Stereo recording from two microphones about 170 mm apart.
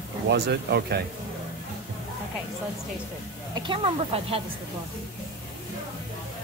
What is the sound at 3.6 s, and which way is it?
Speech, 30° right (ahead or behind).